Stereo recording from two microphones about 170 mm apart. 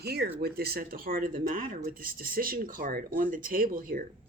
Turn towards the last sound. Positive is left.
turn(degrees=-55)  # may be behind; listen again after turning